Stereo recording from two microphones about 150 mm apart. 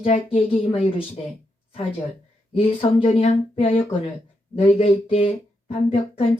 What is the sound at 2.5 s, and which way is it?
Speech, 40° left (ahead or behind).